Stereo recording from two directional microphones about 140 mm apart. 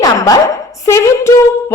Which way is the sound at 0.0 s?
25° left (ahead or behind).